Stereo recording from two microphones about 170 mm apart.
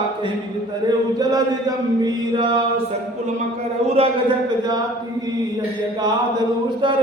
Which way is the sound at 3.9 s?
30° right (ahead or behind).